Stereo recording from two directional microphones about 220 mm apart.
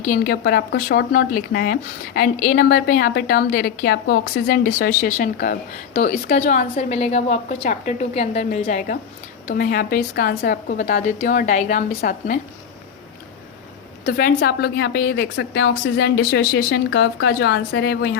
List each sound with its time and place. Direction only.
0.1 s speech: 45° left (ahead or behind)
14.0 s a woman's voice: 45° left (ahead or behind)